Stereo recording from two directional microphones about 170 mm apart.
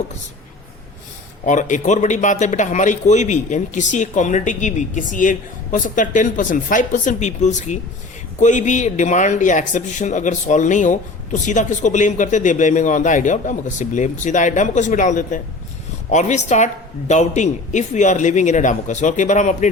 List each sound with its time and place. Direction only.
1.5 s a man's voice: 50° left (ahead or behind)